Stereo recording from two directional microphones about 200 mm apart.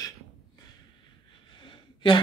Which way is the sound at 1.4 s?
25° left (ahead or behind).